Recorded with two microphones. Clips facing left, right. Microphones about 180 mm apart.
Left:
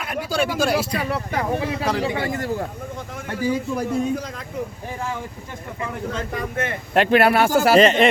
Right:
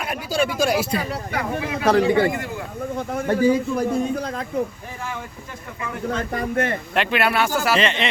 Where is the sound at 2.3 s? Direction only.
40° left (ahead or behind).